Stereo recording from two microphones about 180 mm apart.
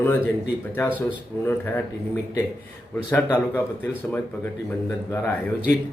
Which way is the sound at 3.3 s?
15° left (ahead or behind).